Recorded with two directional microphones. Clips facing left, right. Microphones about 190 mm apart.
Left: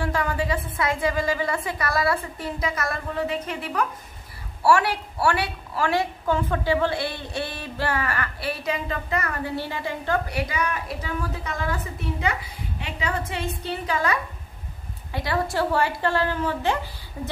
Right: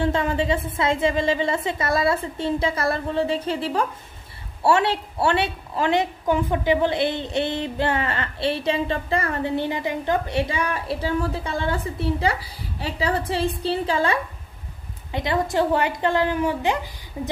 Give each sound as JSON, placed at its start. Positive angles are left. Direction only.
{"t": 0.0, "sound": "a woman's voice", "side_deg": -25}